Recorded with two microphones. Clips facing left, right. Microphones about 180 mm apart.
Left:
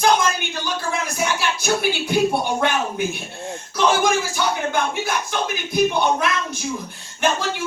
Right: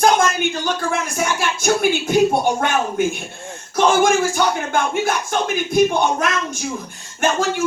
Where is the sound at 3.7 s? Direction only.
50° right (ahead or behind).